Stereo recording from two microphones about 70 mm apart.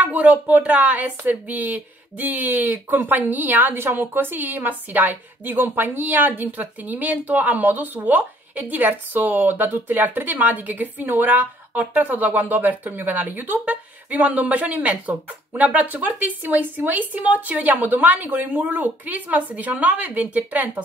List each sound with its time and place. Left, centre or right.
0.0 s speech: right